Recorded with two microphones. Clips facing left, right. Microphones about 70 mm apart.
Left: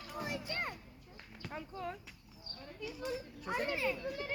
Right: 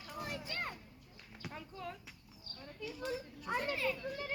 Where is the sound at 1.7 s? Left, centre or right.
Left.